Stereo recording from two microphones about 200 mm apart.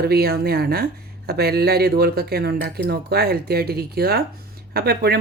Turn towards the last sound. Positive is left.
turn(degrees=-50)  # may be behind; listen again after turning